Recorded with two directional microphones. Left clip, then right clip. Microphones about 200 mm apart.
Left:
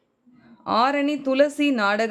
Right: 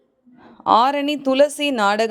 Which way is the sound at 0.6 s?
30° right (ahead or behind).